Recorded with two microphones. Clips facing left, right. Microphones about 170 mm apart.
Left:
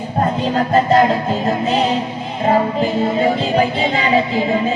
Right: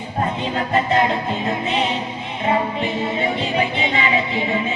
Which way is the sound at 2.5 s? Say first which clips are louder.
Left 5 dB; 40° left (ahead or behind).